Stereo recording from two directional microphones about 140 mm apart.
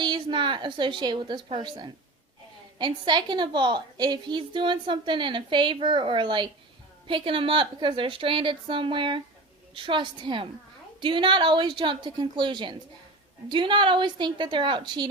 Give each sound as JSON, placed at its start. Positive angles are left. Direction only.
{"t": 0.0, "sound": "a woman's voice", "side_deg": -35}